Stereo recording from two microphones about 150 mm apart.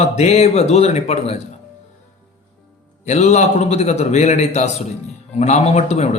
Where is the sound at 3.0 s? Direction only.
50° left (ahead or behind).